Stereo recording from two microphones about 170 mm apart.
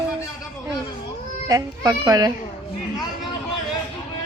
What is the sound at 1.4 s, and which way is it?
Speech, 20° right (ahead or behind).